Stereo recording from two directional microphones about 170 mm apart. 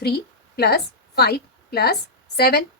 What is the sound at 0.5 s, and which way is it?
A woman's voice, 70° left (ahead or behind).